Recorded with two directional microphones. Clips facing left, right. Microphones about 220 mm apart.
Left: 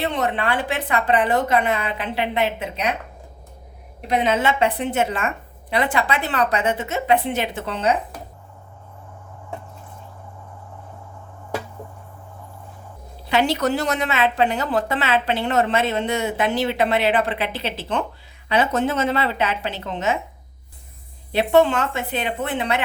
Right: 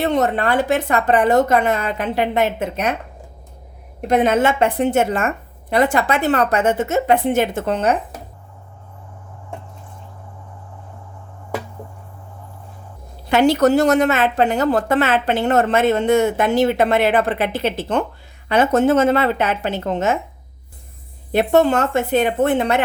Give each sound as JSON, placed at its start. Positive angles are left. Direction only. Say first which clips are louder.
{"t": 0.0, "sound": "a woman's voice", "louder": "right 5 dB", "side_deg": -45}
{"t": 4.0, "sound": "a woman's voice", "louder": "right 5 dB", "side_deg": -50}
{"t": 13.2, "sound": "a woman's voice", "louder": "right 6 dB", "side_deg": -50}
{"t": 21.3, "sound": "a woman's voice", "louder": "right 2 dB", "side_deg": -45}